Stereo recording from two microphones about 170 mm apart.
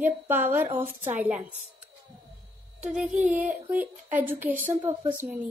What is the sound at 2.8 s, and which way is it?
A woman's voice, 5° right (ahead or behind).